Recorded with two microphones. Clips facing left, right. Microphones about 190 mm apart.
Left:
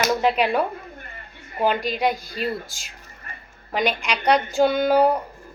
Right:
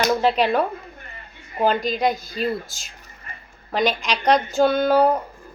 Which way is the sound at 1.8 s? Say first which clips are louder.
Right 1 dB; 10° left (ahead or behind).